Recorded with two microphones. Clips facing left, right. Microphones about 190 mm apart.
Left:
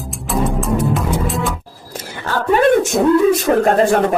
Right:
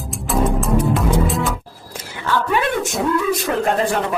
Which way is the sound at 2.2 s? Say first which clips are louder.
Left 6 dB; 45° left (ahead or behind).